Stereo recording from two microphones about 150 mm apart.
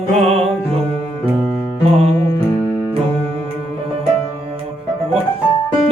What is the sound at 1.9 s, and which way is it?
Music, 45° right (ahead or behind).